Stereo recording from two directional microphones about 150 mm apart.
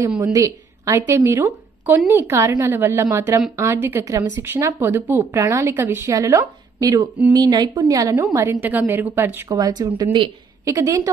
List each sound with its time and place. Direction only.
0.2 s a woman's voice: 25° right (ahead or behind)
9.8 s a woman's voice: 15° right (ahead or behind)